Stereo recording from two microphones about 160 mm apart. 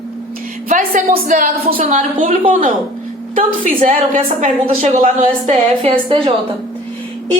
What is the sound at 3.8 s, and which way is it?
A woman's voice, 50° right (ahead or behind).